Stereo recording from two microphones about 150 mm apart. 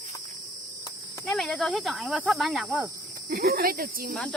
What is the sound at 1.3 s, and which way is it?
Speech, 5° left (ahead or behind).